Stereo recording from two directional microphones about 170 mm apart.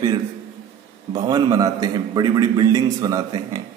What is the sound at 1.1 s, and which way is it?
A man's voice, 25° right (ahead or behind).